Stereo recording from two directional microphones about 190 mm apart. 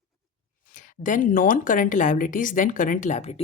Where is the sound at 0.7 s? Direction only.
45° left (ahead or behind).